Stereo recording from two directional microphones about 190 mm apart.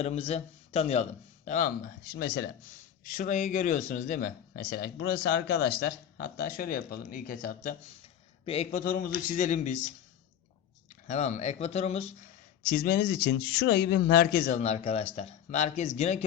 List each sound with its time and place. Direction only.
0.0 s a man's voice: 35° left (ahead or behind)
1.5 s a man's voice: 40° left (ahead or behind)
2.1 s speech: 55° left (ahead or behind)
3.1 s speech: 40° left (ahead or behind)
8.4 s a man's voice: 30° left (ahead or behind)
8.8 s speech: 50° left (ahead or behind)
10.8 s speech: 35° left (ahead or behind)
12.6 s speech: 50° left (ahead or behind); by 16.2 s 35° left (ahead or behind)